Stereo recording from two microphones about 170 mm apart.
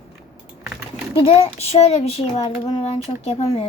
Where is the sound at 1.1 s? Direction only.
30° left (ahead or behind).